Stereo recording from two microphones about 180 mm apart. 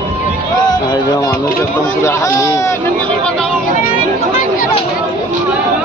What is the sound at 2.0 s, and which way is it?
Speech, 15° left (ahead or behind).